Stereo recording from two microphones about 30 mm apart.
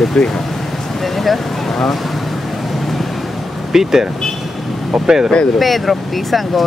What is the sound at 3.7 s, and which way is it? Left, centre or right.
Speech, centre.